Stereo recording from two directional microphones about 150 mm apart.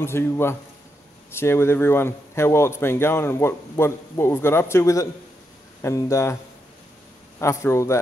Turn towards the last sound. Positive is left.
turn(degrees=20)  # may be behind; listen again after turning